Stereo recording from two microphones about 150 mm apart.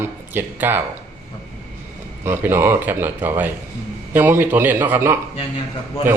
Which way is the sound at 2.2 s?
15° right (ahead or behind).